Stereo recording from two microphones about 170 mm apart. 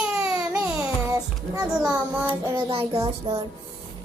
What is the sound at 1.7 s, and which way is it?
Speech, 5° right (ahead or behind).